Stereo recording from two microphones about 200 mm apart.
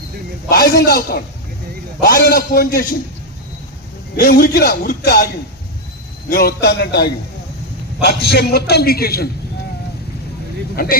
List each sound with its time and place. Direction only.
0.4 s a man's voice: 50° left (ahead or behind)
4.2 s a man's voice: 45° left (ahead or behind)